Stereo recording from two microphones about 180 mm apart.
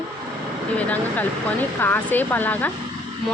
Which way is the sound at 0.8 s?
10° left (ahead or behind).